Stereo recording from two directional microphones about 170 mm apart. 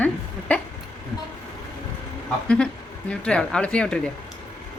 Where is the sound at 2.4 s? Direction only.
5° left (ahead or behind).